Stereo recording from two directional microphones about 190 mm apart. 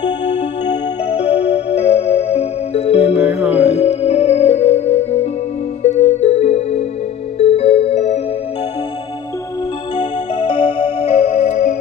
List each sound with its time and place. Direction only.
0.7 s music: 35° left (ahead or behind)
3.2 s music: 5° right (ahead or behind)
3.5 s music: 35° left (ahead or behind)
9.9 s music: 25° left (ahead or behind)